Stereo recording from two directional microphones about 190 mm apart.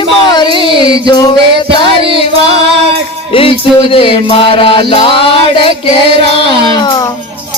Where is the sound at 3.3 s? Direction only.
30° left (ahead or behind).